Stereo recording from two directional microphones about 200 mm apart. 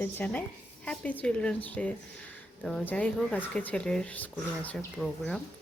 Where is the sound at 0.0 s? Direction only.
10° left (ahead or behind).